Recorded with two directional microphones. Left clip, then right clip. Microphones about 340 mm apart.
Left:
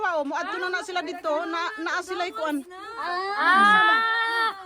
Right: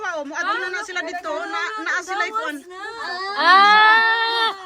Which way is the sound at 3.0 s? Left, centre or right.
Left.